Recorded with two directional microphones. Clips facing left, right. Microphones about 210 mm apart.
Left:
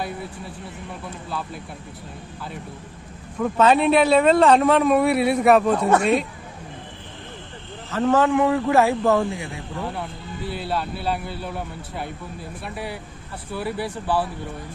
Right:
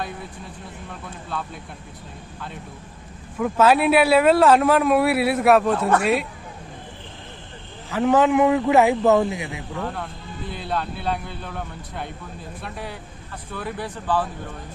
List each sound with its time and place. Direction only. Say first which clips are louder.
3.4 s speech: even; 5° right (ahead or behind)
7.9 s a man's voice: right 1 dB; 15° right (ahead or behind)
9.8 s speech: even; 10° left (ahead or behind)